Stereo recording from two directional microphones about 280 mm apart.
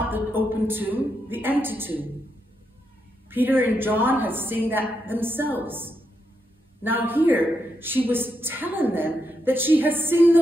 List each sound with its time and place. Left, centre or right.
0.0 s a woman's voice: centre
3.3 s a woman's voice: centre